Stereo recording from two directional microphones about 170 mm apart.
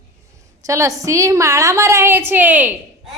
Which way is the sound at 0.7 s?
20° right (ahead or behind).